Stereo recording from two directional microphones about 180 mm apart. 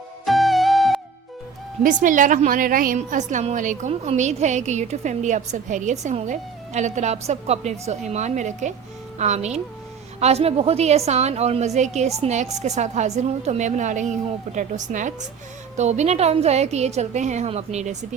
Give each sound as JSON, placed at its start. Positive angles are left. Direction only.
{"t": 0.3, "sound": "music", "side_deg": 0}
{"t": 1.8, "sound": "a woman's voice", "side_deg": -45}